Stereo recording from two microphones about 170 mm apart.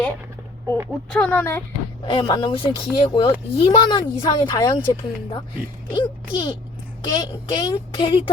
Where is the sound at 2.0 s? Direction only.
30° left (ahead or behind).